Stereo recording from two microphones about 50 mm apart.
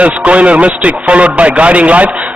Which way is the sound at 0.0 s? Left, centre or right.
Right.